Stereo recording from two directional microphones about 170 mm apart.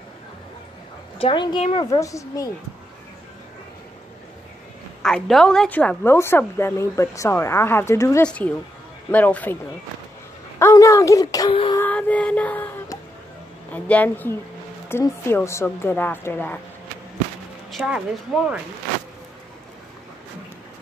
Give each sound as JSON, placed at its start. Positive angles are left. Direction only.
{"t": 1.1, "sound": "a woman's voice", "side_deg": 30}
{"t": 1.9, "sound": "speech", "side_deg": 20}
{"t": 5.0, "sound": "a woman's voice", "side_deg": 5}
{"t": 10.6, "sound": "speech", "side_deg": 20}
{"t": 11.5, "sound": "a sound", "side_deg": 30}
{"t": 11.8, "sound": "child singing", "side_deg": 10}
{"t": 13.7, "sound": "a woman's voice", "side_deg": 10}
{"t": 17.6, "sound": "speech", "side_deg": -5}